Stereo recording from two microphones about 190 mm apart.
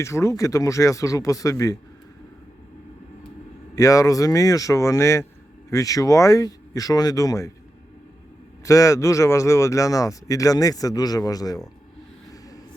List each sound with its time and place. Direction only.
0.0 s speech: 15° left (ahead or behind)
3.8 s speech: 20° left (ahead or behind)
8.6 s speech: 15° left (ahead or behind)